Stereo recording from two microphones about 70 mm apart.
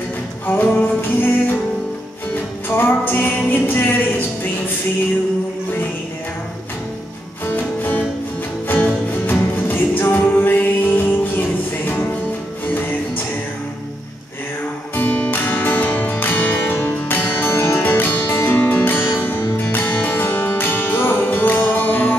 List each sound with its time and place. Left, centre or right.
0.5 s music: left
2.7 s music: left
7.4 s music: left
15.0 s music: left